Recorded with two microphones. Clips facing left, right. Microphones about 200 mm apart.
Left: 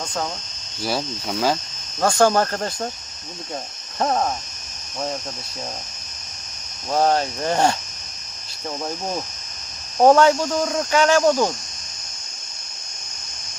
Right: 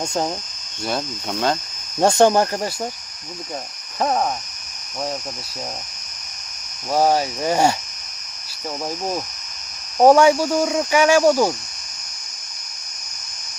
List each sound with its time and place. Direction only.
0.0 s speech: 25° right (ahead or behind)
0.8 s speech: 5° left (ahead or behind)
2.0 s speech: 25° right (ahead or behind)
3.9 s speech: 5° right (ahead or behind)
6.9 s speech: 10° right (ahead or behind)
10.0 s speech: 10° right (ahead or behind)